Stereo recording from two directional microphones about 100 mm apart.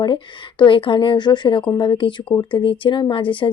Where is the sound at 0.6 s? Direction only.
60° left (ahead or behind).